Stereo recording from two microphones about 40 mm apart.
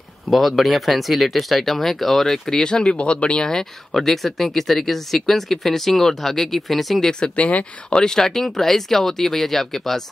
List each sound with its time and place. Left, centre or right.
0.3 s speech: centre
2.6 s speech: left
3.4 s speech: centre
7.9 s speech: centre